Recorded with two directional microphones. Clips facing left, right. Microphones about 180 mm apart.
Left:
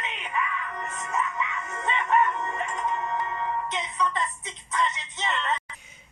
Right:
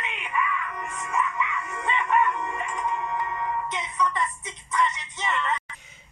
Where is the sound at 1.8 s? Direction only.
20° left (ahead or behind).